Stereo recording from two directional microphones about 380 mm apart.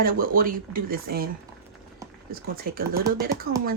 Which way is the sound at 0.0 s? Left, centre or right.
Right.